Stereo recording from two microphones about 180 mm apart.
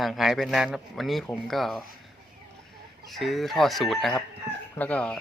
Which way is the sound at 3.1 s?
Centre (ahead or behind).